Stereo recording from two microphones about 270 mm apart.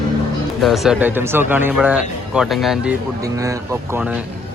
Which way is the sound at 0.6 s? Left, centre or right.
Centre.